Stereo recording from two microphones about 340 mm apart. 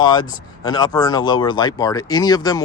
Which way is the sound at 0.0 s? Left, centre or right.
Centre.